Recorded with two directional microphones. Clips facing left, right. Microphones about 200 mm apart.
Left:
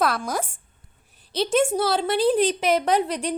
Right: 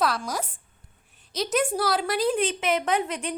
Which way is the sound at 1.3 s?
30° left (ahead or behind).